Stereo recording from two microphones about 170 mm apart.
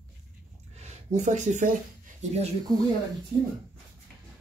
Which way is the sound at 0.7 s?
40° right (ahead or behind).